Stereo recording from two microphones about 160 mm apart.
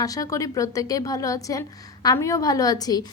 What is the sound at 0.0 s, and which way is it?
A woman's voice, 20° left (ahead or behind).